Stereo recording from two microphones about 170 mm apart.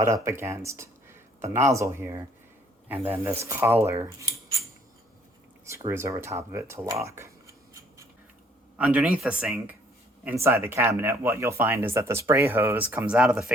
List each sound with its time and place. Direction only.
0.0 s speech: 15° right (ahead or behind)
5.6 s speech: 15° right (ahead or behind)